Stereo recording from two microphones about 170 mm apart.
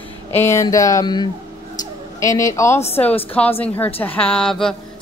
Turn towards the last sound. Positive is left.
turn(degrees=5)  # may be behind; listen again after turning